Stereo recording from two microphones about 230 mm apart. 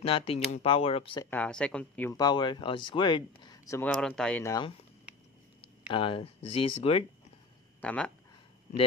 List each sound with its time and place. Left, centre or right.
0.0 s speech: left
1.3 s speech: centre
5.6 s a sound: left
6.8 s speech: left
7.8 s speech: centre